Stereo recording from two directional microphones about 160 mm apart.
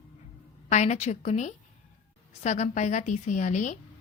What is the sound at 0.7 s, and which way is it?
A woman's voice, 45° left (ahead or behind).